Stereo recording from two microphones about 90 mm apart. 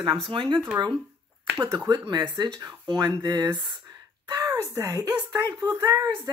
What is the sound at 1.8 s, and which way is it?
Speech, 55° right (ahead or behind).